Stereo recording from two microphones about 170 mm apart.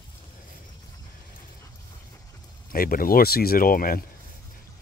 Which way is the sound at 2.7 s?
60° left (ahead or behind).